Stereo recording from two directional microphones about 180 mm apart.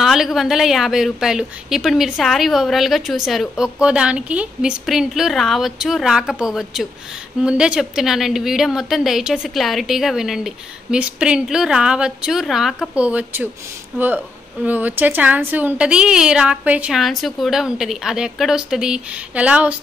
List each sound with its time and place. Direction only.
0.0 s a woman's voice: centre (ahead or behind)